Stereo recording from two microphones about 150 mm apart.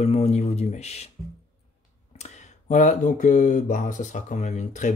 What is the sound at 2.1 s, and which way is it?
Speech, 50° left (ahead or behind).